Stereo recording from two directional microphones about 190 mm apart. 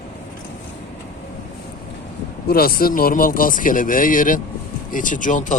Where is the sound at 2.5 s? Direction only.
55° left (ahead or behind).